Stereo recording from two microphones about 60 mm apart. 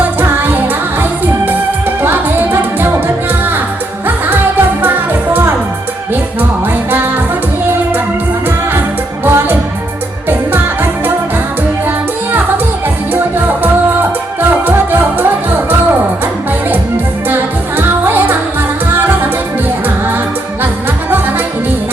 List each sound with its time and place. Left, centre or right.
0.0 s music: right
2.0 s music: right
4.8 s music: right
9.2 s music: right
17.2 s music: right